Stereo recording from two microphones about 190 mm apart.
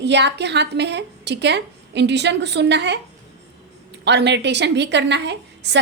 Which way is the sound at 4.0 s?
65° right (ahead or behind).